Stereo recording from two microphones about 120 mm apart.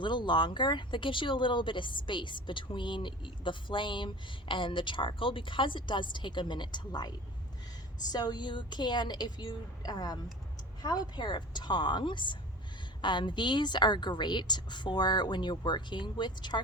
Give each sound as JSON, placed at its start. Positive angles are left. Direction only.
{"t": 0.0, "sound": "speech", "side_deg": 40}
{"t": 8.1, "sound": "speech", "side_deg": 35}